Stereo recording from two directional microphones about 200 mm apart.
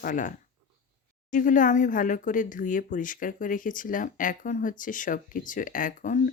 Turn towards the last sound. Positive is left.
turn(degrees=40)  # may be behind; listen again after turning